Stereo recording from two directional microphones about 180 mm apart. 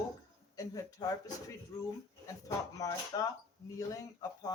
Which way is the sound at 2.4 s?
20° left (ahead or behind).